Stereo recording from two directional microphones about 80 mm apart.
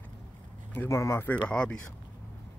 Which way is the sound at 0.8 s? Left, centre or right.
Left.